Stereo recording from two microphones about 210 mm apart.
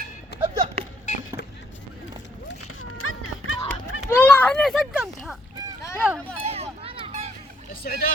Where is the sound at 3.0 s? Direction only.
80° left.